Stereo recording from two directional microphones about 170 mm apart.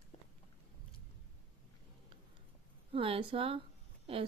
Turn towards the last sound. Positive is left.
turn(degrees=-35)  # may be behind; listen again after turning